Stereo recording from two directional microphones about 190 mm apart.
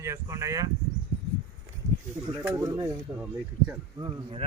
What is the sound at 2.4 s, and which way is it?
Speech, 15° right (ahead or behind).